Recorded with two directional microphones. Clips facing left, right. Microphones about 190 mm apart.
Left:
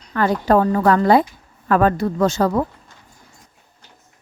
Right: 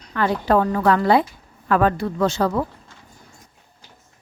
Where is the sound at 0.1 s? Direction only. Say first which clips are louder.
Left 3 dB; 45° left (ahead or behind).